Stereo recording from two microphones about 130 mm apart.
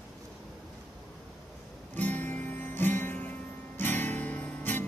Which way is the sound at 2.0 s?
15° left (ahead or behind).